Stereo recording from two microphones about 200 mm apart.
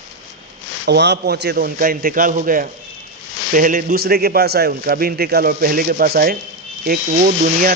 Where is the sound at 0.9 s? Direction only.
55° right (ahead or behind).